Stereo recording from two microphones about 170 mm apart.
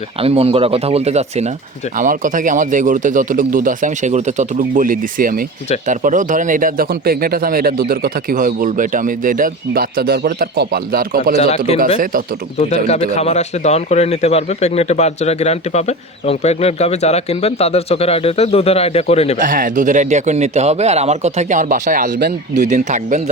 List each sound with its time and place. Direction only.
0.2 s speech: 35° right (ahead or behind)
2.0 s speech: 50° right (ahead or behind)
11.3 s speech: 40° left (ahead or behind)
19.4 s speech: 50° right (ahead or behind)